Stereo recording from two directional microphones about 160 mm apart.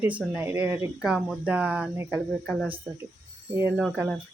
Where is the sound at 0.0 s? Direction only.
10° right (ahead or behind).